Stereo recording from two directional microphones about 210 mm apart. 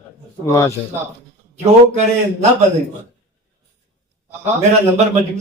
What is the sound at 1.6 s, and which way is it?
Speech, 35° right (ahead or behind).